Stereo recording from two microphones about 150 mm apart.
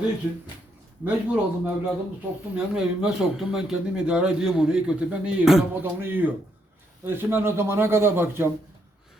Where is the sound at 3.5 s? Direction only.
5° right (ahead or behind).